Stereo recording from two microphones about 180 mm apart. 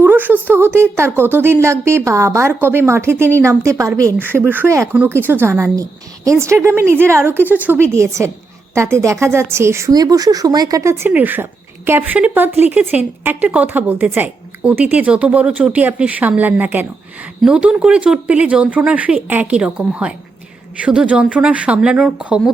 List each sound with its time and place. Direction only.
0.0 s a woman's voice: 10° right (ahead or behind)